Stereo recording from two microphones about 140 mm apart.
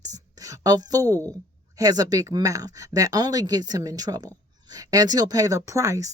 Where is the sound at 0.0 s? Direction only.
25° right (ahead or behind).